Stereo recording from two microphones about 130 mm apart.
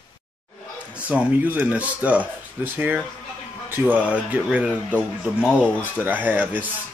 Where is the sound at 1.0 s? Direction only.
15° right (ahead or behind).